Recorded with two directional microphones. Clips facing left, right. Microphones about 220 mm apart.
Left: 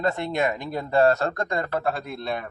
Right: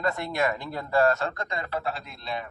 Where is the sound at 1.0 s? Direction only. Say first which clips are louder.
Left 6 dB; 40° left (ahead or behind).